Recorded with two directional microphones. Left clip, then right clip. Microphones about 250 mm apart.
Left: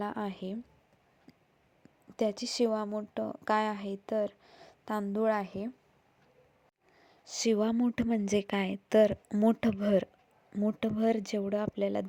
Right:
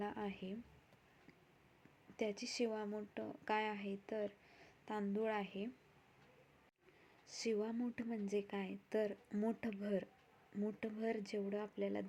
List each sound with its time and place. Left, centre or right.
0.0 s a woman's voice: left
2.1 s speech: left
7.3 s a woman's voice: left